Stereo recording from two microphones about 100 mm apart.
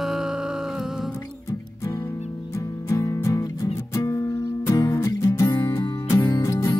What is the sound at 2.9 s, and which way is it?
Music, 30° left (ahead or behind).